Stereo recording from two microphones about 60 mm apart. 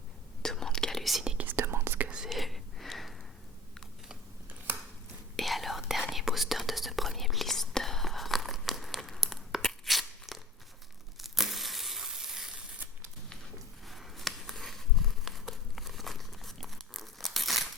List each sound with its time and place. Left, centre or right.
0.4 s whispering: centre
1.5 s whispering: right
2.0 s whispering: centre
2.3 s a sound: centre
4.4 s scissors: right
5.4 s whispering: centre
9.6 s crunch: centre
11.2 s tearing: centre
13.8 s a sound: centre